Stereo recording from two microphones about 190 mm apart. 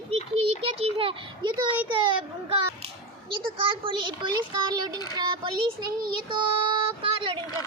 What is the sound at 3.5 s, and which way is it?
A child's voice, 25° right (ahead or behind).